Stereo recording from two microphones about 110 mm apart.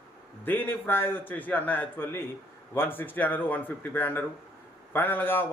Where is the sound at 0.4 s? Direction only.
20° left (ahead or behind).